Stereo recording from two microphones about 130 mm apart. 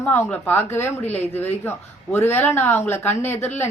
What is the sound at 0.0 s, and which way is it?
Speech, 10° left (ahead or behind).